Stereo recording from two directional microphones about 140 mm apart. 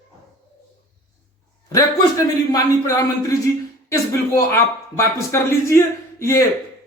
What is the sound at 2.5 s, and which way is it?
Speech, 25° left (ahead or behind).